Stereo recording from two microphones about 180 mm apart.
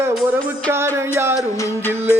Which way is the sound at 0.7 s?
15° right (ahead or behind).